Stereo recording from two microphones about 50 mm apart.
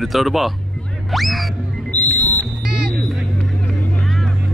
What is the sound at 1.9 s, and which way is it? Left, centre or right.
Music, left.